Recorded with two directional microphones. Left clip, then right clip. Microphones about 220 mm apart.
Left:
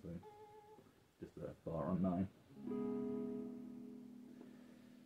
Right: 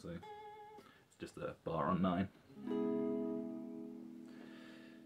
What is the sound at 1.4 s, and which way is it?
Speech, 15° right (ahead or behind).